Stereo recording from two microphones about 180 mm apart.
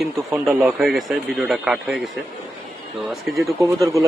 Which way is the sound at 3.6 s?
15° right (ahead or behind).